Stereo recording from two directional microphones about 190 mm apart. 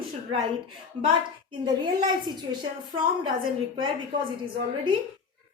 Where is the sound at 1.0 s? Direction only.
25° right (ahead or behind).